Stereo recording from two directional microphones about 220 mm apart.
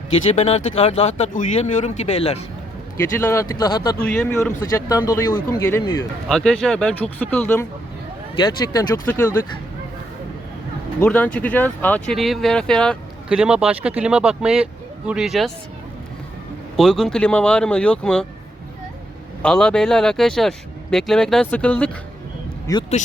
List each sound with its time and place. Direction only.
0.3 s speech: 30° left (ahead or behind)
3.5 s speech: 15° left (ahead or behind)
4.0 s speech: 5° left (ahead or behind)
6.2 s speech: centre (ahead or behind)
8.7 s speech: 10° left (ahead or behind)
11.0 s speech: 5° left (ahead or behind)
16.7 s speech: centre (ahead or behind)
19.4 s speech: 5° left (ahead or behind)
22.7 s speech: 15° left (ahead or behind)